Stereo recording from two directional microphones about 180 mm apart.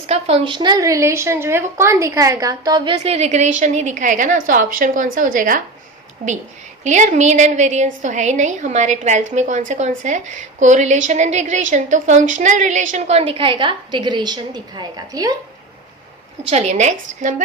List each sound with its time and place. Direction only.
0.1 s a woman's voice: 35° right (ahead or behind)
6.8 s a woman's voice: 40° right (ahead or behind); by 15.4 s 20° right (ahead or behind)
16.5 s a woman's voice: 40° right (ahead or behind)